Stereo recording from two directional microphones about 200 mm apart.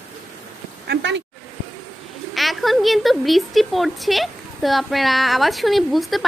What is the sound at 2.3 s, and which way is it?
A woman's voice, centre (ahead or behind).